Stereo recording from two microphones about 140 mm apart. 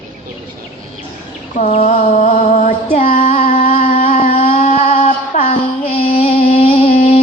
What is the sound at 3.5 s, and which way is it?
Music, 55° left (ahead or behind).